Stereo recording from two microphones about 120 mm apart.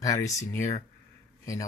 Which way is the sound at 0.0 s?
25° left (ahead or behind).